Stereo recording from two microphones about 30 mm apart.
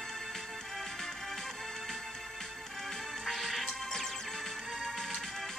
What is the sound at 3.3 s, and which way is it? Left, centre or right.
Music, centre.